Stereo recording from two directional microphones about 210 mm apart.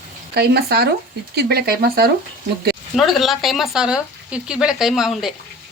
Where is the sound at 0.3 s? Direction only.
50° right (ahead or behind).